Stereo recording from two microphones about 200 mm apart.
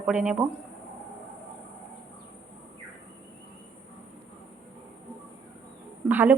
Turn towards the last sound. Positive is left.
turn(degrees=-10)  # may be behind; listen again after turning